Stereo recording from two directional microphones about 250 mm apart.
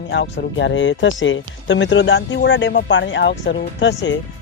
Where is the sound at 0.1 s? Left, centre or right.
Left.